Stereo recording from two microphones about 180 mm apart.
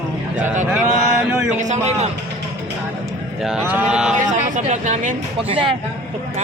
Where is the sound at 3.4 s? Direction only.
5° right (ahead or behind).